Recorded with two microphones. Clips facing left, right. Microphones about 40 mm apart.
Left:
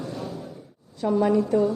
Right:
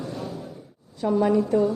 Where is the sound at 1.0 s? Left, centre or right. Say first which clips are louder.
Even; centre.